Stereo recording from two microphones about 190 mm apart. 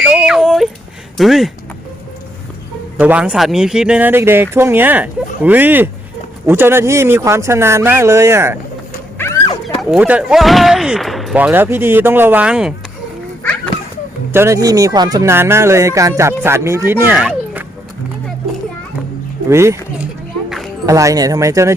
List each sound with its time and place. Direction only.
0.0 s a sound: 5° right (ahead or behind)
1.1 s speech: centre (ahead or behind)
3.0 s speech: 5° right (ahead or behind)
9.1 s a sound: 15° left (ahead or behind)
9.8 s speech: 5° right (ahead or behind)
14.3 s speech: 15° right (ahead or behind)
19.5 s speech: 15° right (ahead or behind)
20.8 s speech: 15° right (ahead or behind)